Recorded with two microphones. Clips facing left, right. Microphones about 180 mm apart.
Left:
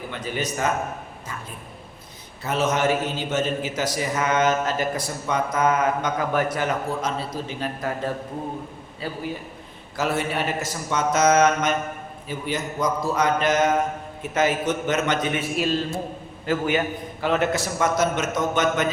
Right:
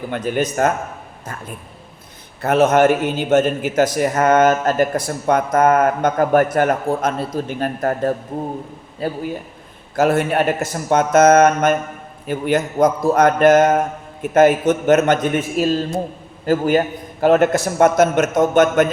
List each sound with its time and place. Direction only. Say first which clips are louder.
0.1 s a man's voice: right 9 dB; 55° right (ahead or behind)
2.4 s a man's voice: right 9 dB; 60° right (ahead or behind)